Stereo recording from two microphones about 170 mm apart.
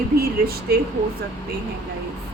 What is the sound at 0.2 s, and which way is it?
Speech, 65° right (ahead or behind).